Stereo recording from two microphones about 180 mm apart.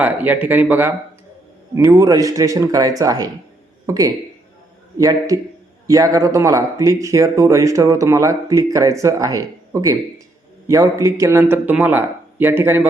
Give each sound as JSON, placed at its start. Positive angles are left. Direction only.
{"t": 0.0, "sound": "speech", "side_deg": -10}